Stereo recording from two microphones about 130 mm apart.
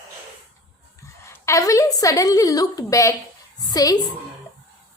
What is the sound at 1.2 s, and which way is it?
A woman's voice, 20° left (ahead or behind).